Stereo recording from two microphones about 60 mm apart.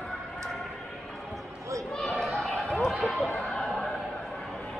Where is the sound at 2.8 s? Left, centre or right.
Centre.